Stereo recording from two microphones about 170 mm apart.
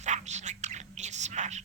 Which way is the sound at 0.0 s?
45° right (ahead or behind).